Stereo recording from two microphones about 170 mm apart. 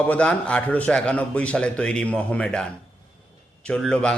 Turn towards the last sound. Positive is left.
turn(degrees=5)  # may be behind; listen again after turning